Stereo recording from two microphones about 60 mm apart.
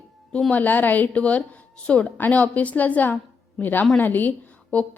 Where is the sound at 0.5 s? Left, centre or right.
Left.